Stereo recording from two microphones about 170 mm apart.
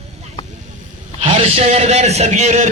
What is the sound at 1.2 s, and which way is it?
A man's voice, 40° right (ahead or behind).